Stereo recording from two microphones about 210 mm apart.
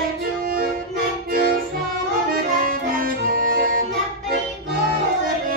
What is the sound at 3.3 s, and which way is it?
Music, 40° right (ahead or behind).